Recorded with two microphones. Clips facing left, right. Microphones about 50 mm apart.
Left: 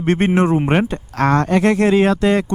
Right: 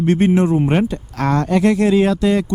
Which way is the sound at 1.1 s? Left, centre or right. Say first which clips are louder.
Left 2 dB; left.